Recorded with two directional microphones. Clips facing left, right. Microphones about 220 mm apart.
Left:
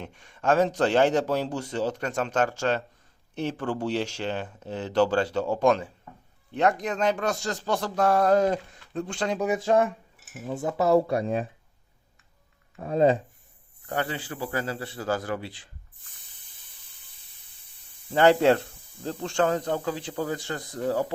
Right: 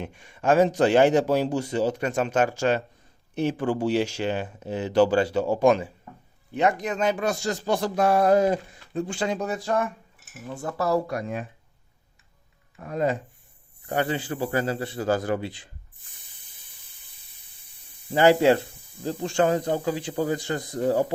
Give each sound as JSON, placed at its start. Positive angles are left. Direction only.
{"t": 0.0, "sound": "a man's voice", "side_deg": -10}
{"t": 9.4, "sound": "speech", "side_deg": 15}
{"t": 12.8, "sound": "speech", "side_deg": 30}
{"t": 13.8, "sound": "a man's voice", "side_deg": -15}
{"t": 18.1, "sound": "a man's voice", "side_deg": -5}